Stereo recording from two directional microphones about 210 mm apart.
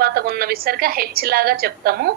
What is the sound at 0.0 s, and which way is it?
A woman's voice, 45° right (ahead or behind).